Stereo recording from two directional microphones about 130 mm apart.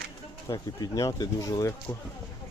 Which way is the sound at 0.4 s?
25° left (ahead or behind).